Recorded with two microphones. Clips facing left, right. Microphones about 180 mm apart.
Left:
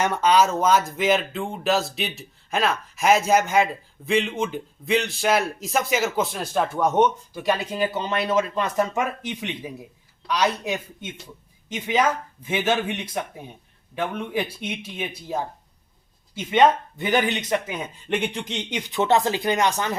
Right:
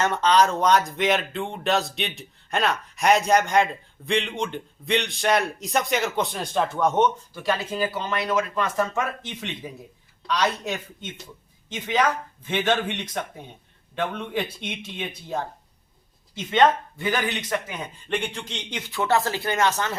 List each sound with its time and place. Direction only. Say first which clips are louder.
0.0 s speech: left 1 dB; 10° left (ahead or behind)
18.1 s speech: left 3 dB; 10° left (ahead or behind)